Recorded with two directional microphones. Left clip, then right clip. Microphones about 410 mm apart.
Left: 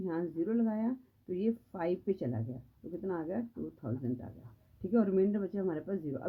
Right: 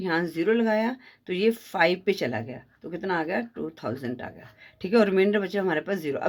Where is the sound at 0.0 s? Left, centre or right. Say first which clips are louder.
Right 10 dB; centre.